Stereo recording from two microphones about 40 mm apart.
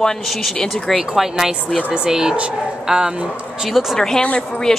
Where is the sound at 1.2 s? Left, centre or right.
Centre.